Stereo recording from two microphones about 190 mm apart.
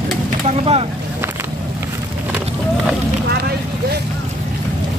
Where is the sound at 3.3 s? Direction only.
60° right (ahead or behind).